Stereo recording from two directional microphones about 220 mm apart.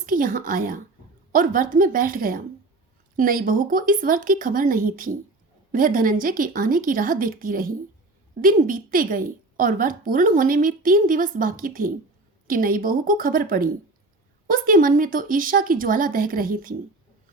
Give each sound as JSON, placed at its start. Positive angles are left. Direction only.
{"t": 0.0, "sound": "a woman's voice", "side_deg": -40}